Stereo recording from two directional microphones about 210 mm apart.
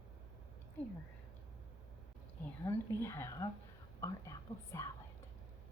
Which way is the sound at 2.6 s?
10° left (ahead or behind).